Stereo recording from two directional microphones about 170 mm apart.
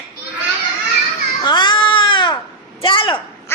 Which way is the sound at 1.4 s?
25° left (ahead or behind).